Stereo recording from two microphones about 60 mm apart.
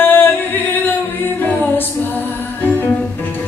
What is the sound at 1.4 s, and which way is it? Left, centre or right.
Music, left.